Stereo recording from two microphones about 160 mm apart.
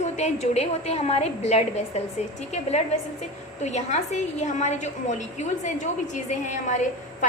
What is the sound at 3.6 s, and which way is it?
A woman's voice, 45° left (ahead or behind).